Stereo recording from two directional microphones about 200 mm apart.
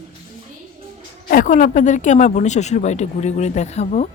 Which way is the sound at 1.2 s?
40° left (ahead or behind).